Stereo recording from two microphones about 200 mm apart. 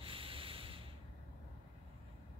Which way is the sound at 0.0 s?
25° right (ahead or behind).